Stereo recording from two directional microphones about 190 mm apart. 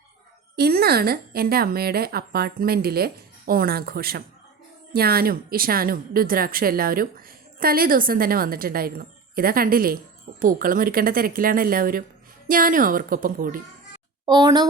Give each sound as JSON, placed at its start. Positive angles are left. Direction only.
{"t": 0.5, "sound": "speech", "side_deg": -55}
{"t": 14.3, "sound": "a woman's voice", "side_deg": -20}